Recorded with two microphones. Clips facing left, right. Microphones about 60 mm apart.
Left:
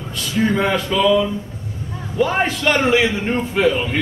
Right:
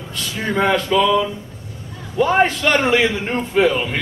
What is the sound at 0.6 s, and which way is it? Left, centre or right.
Speech, centre.